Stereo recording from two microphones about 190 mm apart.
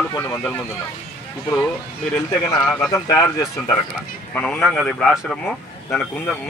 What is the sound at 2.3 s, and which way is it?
Speech, 20° left (ahead or behind).